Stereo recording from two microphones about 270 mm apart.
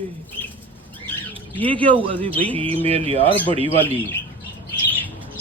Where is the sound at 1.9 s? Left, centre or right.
Centre.